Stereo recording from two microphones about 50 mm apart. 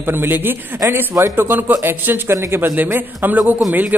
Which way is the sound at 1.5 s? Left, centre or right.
Right.